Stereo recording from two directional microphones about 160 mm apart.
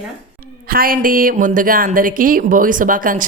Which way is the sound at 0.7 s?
65° right (ahead or behind).